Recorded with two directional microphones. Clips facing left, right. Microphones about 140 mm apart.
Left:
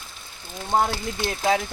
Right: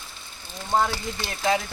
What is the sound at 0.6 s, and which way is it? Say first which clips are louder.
Speech: left 1 dB; 20° left (ahead or behind).